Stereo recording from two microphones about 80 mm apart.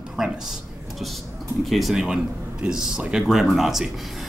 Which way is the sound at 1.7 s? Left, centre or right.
Centre.